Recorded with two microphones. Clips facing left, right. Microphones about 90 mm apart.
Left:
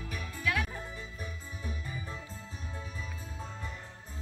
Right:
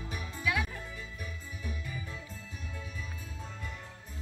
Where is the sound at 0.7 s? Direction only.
30° left (ahead or behind).